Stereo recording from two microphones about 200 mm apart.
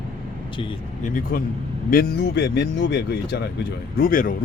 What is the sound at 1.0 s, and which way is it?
Speech, 45° left (ahead or behind).